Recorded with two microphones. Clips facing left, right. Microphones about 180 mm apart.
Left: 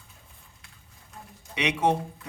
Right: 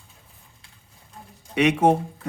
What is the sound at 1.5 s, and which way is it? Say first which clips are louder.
Speech: right 7 dB; 50° right (ahead or behind).